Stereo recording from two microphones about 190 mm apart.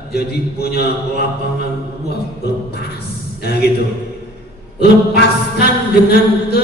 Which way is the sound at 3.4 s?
55° left (ahead or behind).